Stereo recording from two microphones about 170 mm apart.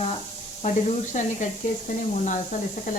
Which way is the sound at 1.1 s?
45° left (ahead or behind).